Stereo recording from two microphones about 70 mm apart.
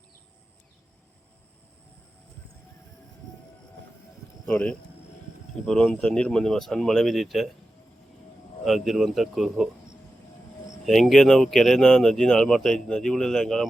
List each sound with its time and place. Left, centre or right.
4.5 s speech: centre
8.6 s speech: centre
10.8 s speech: centre